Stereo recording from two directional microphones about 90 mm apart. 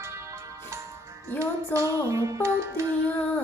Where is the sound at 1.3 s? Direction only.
35° right (ahead or behind).